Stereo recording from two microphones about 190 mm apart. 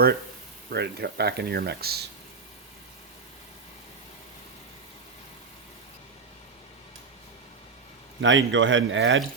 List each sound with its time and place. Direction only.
0.7 s speech: 60° right (ahead or behind)
8.2 s speech: 75° right (ahead or behind)